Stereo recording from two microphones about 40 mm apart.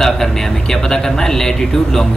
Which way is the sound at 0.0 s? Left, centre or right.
Centre.